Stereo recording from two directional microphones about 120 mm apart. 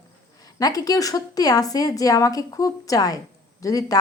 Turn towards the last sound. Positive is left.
turn(degrees=30)  # may be behind; listen again after turning